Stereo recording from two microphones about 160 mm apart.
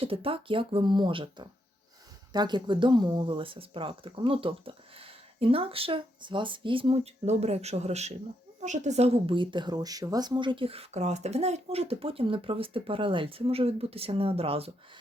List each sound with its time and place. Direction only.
0.0 s a woman's voice: 35° right (ahead or behind)